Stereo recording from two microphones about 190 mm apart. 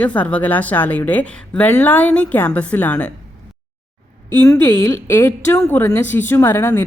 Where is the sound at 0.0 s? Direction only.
5° left (ahead or behind).